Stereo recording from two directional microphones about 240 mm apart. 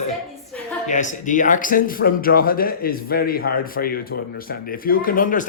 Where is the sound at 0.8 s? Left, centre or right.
Left.